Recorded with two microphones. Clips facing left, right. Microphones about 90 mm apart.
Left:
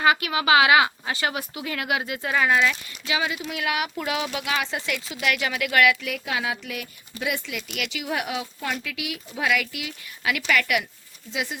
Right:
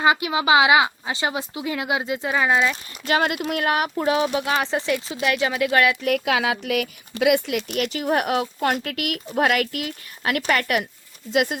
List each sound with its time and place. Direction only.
0.0 s speech: 20° right (ahead or behind)
3.1 s speech: 60° right (ahead or behind)
3.4 s speech: 45° right (ahead or behind)
6.1 s speech: 70° right (ahead or behind)
7.8 s speech: 40° right (ahead or behind)
11.3 s speech: 55° right (ahead or behind)